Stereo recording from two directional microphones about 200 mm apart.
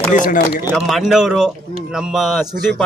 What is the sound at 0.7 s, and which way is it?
A man's voice, centre (ahead or behind).